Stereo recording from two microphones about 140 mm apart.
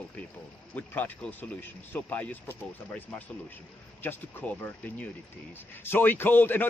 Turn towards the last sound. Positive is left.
turn(degrees=15)  # may be behind; listen again after turning